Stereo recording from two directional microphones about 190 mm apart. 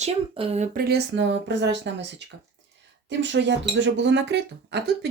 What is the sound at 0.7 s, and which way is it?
Speech, 55° right (ahead or behind).